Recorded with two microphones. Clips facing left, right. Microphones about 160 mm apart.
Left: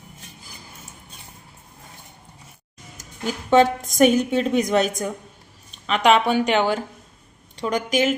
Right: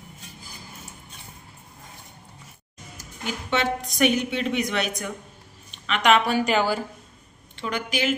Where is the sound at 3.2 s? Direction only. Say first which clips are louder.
Left 9 dB; 40° left (ahead or behind); by 6.4 s 25° left (ahead or behind).